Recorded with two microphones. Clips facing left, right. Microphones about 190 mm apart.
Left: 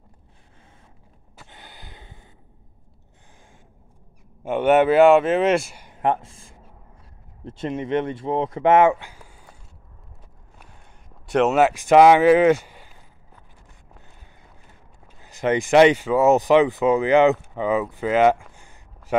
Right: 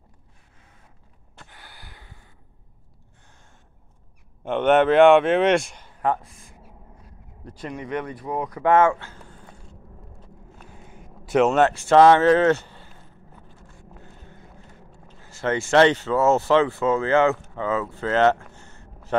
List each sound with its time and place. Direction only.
1.5 s gasp: 20° left (ahead or behind)
4.5 s a man's voice: 10° left (ahead or behind)
5.9 s a sound: 20° left (ahead or behind)
7.4 s speech: 25° left (ahead or behind)
10.8 s speech: 5° right (ahead or behind); by 12.9 s 10° left (ahead or behind)
15.0 s speech: 15° left (ahead or behind)